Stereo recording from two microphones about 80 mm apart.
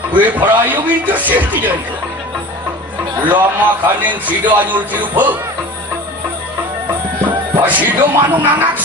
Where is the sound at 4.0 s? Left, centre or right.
Right.